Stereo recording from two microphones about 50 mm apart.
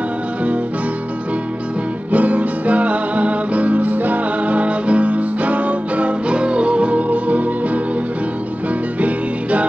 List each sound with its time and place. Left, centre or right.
2.1 s music: right
9.0 s music: right